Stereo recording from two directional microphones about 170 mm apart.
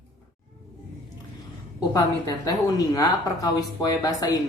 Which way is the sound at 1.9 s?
20° left (ahead or behind).